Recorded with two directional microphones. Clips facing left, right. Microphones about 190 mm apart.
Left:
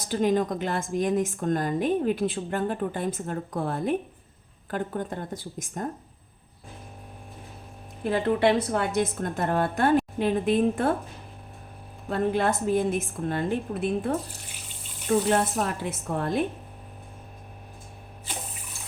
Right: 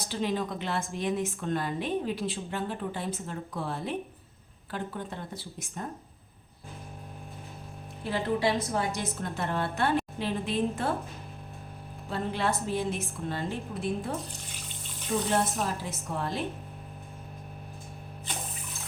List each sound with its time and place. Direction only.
0.0 s a woman's voice: 50° left (ahead or behind)
8.0 s a woman's voice: 55° left (ahead or behind)
12.0 s a woman's voice: 50° left (ahead or behind)
15.3 s a woman's voice: 60° left (ahead or behind)